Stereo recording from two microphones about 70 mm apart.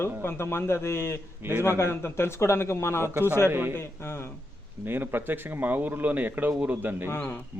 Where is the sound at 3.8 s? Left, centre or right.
Left.